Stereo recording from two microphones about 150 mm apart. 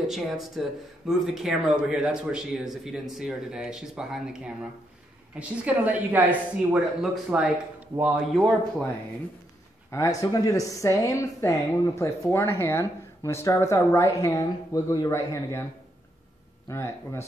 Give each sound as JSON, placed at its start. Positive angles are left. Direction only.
{"t": 0.1, "sound": "speech", "side_deg": 0}
{"t": 9.8, "sound": "speech", "side_deg": 20}
{"t": 16.6, "sound": "speech", "side_deg": 15}